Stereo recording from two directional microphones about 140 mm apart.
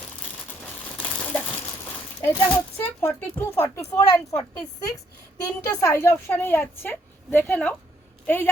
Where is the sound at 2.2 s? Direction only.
15° left (ahead or behind).